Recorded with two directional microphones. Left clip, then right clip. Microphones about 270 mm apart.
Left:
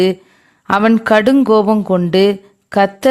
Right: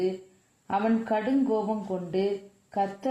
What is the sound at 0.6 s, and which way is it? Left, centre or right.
Speech, left.